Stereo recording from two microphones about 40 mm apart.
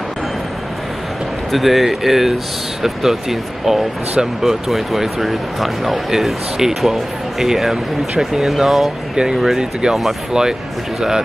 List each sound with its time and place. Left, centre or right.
1.5 s speech: centre
9.1 s speech: centre